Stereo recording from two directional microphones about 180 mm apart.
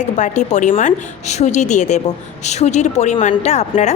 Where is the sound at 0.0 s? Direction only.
40° left (ahead or behind).